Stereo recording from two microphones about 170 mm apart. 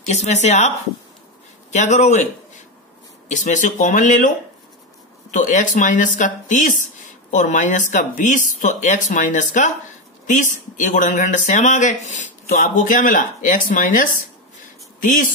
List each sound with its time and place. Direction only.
0.0 s speech: 45° left (ahead or behind)
3.3 s speech: 45° left (ahead or behind)
5.3 s speech: 50° left (ahead or behind)